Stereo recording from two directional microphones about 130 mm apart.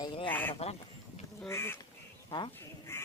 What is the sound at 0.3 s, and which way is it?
Duck, 15° left (ahead or behind).